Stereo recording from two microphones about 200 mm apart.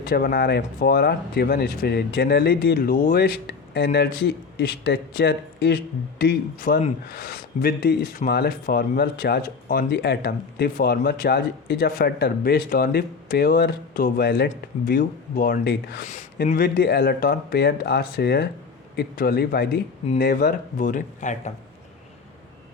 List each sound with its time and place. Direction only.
0.0 s speech: 50° left (ahead or behind)